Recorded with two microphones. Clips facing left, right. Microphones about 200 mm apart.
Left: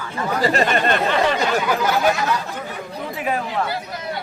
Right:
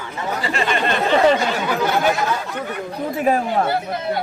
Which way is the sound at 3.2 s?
40° right (ahead or behind).